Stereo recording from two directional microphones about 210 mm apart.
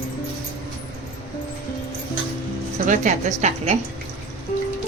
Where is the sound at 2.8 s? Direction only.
35° right (ahead or behind).